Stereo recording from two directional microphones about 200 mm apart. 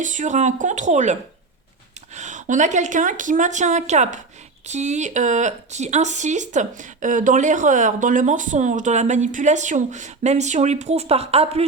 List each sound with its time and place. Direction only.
0.0 s speech: 40° right (ahead or behind)
2.1 s speech: 35° right (ahead or behind)